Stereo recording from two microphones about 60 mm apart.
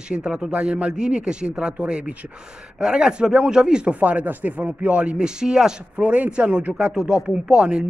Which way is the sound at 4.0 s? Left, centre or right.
Right.